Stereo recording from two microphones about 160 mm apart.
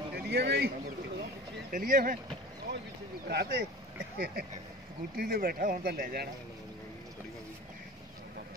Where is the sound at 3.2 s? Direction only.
90° right.